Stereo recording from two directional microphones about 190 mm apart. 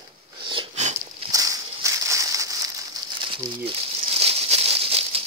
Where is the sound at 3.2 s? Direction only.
30° right (ahead or behind).